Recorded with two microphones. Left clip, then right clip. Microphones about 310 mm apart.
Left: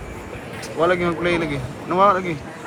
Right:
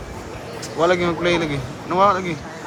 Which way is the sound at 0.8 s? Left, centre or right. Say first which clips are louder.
Right 1 dB; centre.